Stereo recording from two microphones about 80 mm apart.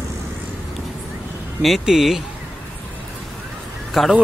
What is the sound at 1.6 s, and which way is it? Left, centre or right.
Speech, centre.